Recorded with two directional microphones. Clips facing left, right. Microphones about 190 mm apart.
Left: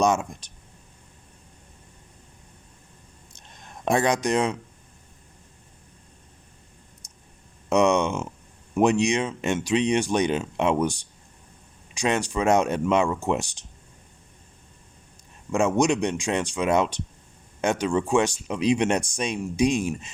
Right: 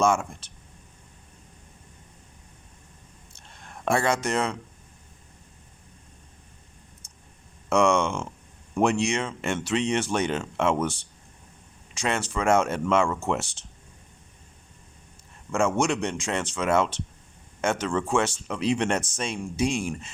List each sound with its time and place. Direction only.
0.0 s speech: 20° left (ahead or behind)
3.3 s a sound: 20° left (ahead or behind)
7.0 s clicking: 15° left (ahead or behind)
7.7 s speech: 20° left (ahead or behind)
15.5 s speech: 15° left (ahead or behind)